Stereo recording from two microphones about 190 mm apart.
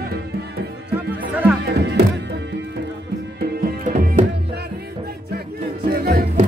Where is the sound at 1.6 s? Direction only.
60° right (ahead or behind).